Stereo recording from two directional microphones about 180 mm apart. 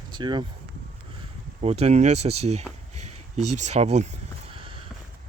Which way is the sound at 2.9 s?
40° right (ahead or behind).